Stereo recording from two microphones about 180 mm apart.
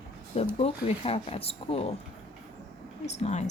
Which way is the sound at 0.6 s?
35° left (ahead or behind).